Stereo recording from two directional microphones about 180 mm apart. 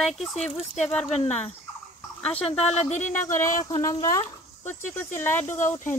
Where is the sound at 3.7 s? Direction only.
20° left (ahead or behind).